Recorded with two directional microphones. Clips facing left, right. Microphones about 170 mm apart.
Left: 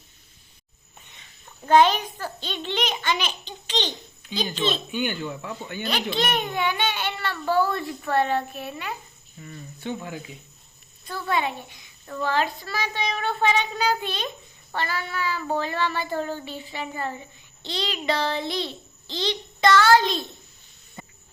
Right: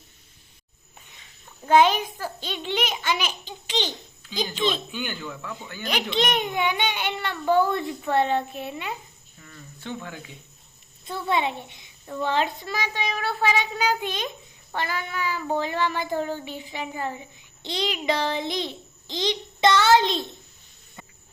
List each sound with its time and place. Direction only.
1.6 s child singing: 10° right (ahead or behind)
4.9 s speech: 15° left (ahead or behind)
5.8 s a child's voice: 15° right (ahead or behind)
9.4 s speech: 20° left (ahead or behind)
11.0 s a child's voice: 20° right (ahead or behind)
12.0 s child singing: 15° right (ahead or behind)